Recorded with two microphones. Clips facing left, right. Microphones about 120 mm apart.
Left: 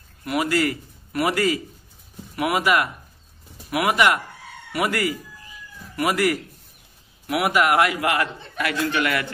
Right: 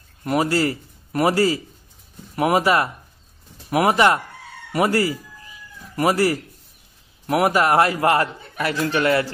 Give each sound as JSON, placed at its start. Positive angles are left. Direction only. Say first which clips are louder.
{"t": 0.2, "sound": "a man's voice", "louder": "right 2 dB", "side_deg": -35}